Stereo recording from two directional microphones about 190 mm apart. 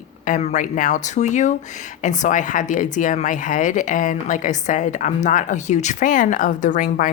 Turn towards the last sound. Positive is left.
turn(degrees=45)  # may be behind; listen again after turning